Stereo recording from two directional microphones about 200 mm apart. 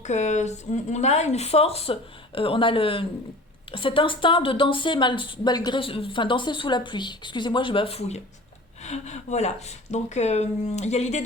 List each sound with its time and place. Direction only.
0.0 s a woman's voice: 35° left (ahead or behind)